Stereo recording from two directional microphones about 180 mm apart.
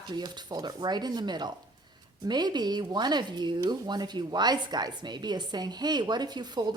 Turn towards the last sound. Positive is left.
turn(degrees=-25)  # may be behind; listen again after turning